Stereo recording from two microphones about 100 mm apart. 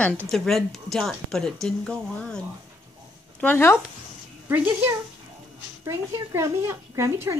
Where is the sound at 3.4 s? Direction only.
20° left (ahead or behind).